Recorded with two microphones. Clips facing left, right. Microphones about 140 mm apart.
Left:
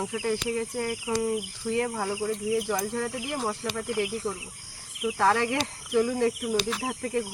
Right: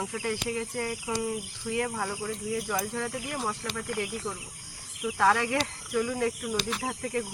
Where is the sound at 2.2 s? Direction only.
25° left (ahead or behind).